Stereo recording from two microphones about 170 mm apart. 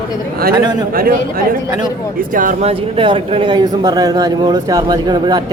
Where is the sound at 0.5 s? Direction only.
25° right (ahead or behind).